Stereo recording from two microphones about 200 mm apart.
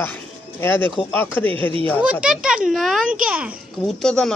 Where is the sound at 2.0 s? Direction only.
5° right (ahead or behind).